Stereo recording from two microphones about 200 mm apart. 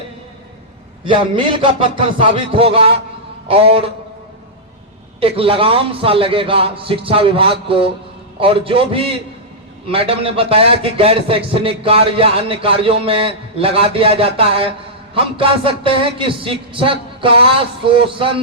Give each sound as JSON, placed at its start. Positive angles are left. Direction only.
{"t": 1.0, "sound": "a man's voice", "side_deg": -25}
{"t": 5.2, "sound": "a man's voice", "side_deg": -25}